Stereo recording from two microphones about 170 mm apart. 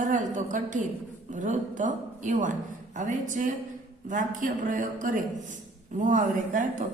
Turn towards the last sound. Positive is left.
turn(degrees=-50)  # may be behind; listen again after turning